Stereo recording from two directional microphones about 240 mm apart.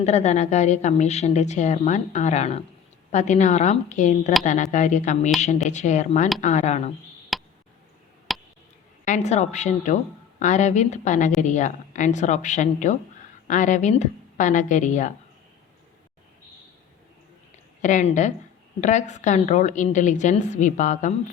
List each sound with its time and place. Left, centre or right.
0.0 s a woman's voice: left
7.3 s a sound: centre
9.0 s a woman's voice: left
17.8 s a woman's voice: left